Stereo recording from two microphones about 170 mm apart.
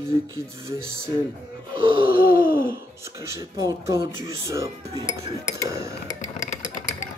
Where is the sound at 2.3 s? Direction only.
10° right (ahead or behind).